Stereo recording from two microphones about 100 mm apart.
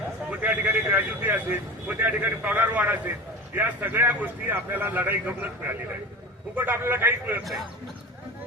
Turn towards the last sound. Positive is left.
turn(degrees=-20)  # may be behind; listen again after turning